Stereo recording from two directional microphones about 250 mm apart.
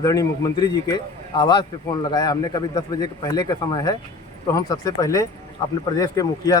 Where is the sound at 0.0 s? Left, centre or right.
Centre.